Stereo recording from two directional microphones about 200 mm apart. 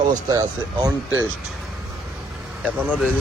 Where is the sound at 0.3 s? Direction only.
20° right (ahead or behind).